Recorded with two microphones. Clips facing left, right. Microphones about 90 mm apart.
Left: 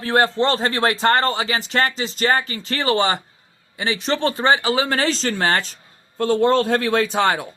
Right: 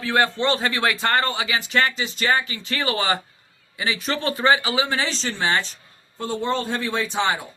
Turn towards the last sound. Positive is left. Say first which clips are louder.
# left 5 dB
turn(degrees=55)  # may be behind; listen again after turning